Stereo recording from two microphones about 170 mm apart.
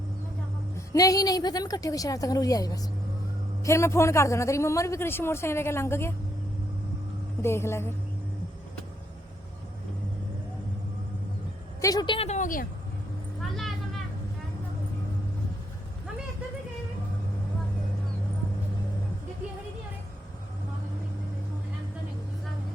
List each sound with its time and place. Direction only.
0.9 s a woman's voice: 20° left (ahead or behind)
7.4 s a man's voice: 15° left (ahead or behind)
11.8 s a woman's voice: 20° left (ahead or behind); by 12.6 s 50° left (ahead or behind)
13.6 s vehicle: centre (ahead or behind)